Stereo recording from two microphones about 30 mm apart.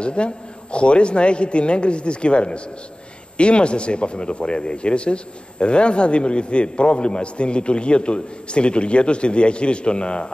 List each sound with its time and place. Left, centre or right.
0.0 s speech: left